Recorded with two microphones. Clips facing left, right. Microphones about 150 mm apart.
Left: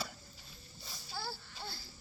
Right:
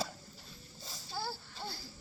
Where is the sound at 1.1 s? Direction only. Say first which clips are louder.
Right 3 dB; 15° right (ahead or behind).